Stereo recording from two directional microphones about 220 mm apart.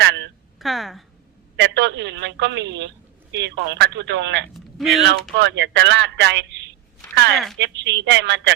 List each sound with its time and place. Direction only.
0.0 s a sound: 50° right (ahead or behind)
0.6 s a woman's voice: centre (ahead or behind)
1.5 s a woman's voice: 50° right (ahead or behind)
4.8 s a woman's voice: centre (ahead or behind)
5.4 s a woman's voice: 50° right (ahead or behind)
7.6 s speech: 55° right (ahead or behind)